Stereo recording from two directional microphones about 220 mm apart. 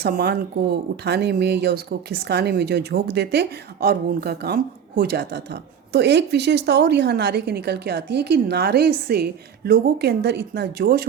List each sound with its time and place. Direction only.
0.0 s speech: 45° right (ahead or behind)